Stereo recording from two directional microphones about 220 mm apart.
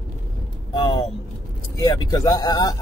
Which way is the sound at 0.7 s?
20° left (ahead or behind).